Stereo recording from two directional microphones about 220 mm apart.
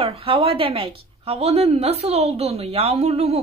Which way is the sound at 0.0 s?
25° right (ahead or behind).